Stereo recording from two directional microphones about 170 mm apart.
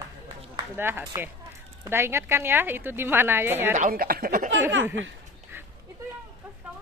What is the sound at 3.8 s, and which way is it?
Speech, 55° right (ahead or behind).